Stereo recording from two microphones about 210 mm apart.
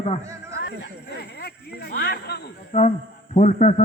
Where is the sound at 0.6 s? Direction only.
50° left (ahead or behind).